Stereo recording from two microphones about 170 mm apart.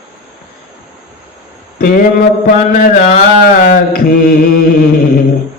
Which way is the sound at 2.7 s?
45° left (ahead or behind).